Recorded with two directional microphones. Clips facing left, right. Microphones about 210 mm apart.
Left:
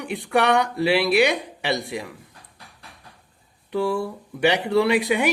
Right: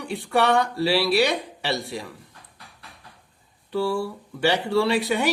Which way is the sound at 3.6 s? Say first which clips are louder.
Left 1 dB; 15° left (ahead or behind).